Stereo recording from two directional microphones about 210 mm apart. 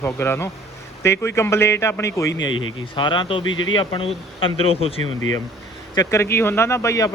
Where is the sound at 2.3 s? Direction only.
65° left (ahead or behind).